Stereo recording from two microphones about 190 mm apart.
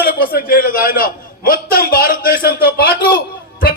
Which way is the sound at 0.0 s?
50° left (ahead or behind).